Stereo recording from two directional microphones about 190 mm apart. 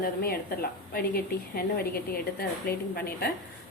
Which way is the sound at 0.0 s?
50° left (ahead or behind).